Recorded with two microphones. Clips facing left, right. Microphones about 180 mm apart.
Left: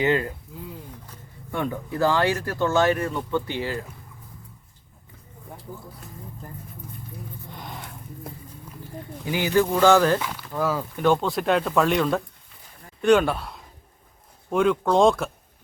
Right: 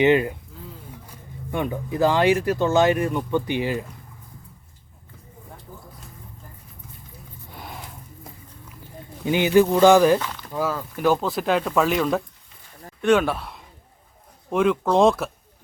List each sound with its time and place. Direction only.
0.0 s speech: 20° right (ahead or behind)
7.5 s a sound: 5° right (ahead or behind)
9.2 s speech: 20° right (ahead or behind); by 15.3 s centre (ahead or behind)